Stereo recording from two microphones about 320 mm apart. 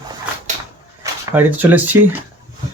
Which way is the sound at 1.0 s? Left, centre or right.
Centre.